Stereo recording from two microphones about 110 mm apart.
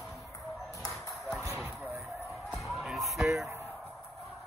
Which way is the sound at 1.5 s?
20° right (ahead or behind).